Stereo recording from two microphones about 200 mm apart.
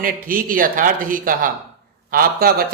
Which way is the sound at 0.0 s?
45° right (ahead or behind).